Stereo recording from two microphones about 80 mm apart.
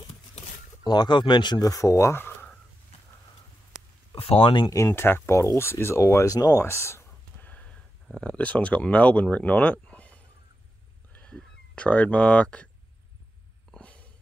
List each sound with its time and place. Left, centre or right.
0.8 s speech: left
1.7 s speech: left
4.1 s speech: left
4.6 s speech: left
6.6 s a sound: left
7.4 s speech: centre
11.1 s cat: centre
13.7 s a sound: centre